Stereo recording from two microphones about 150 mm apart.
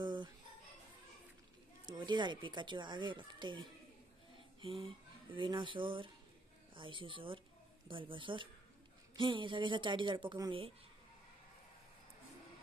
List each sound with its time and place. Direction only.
0.0 s music: 30° right (ahead or behind)
1.9 s speech: 30° right (ahead or behind)